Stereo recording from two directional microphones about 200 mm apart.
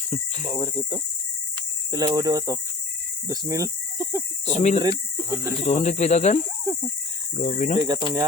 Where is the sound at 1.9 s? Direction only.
20° right (ahead or behind).